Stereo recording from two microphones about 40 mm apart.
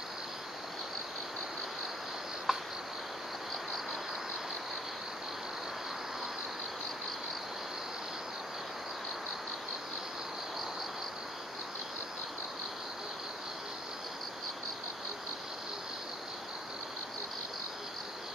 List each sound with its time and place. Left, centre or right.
2.5 s cricket: centre